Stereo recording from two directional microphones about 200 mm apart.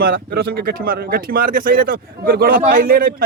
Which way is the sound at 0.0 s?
50° right (ahead or behind).